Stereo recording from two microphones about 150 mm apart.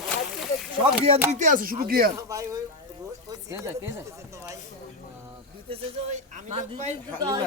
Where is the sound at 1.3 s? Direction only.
55° right (ahead or behind); by 2.1 s 75° right (ahead or behind).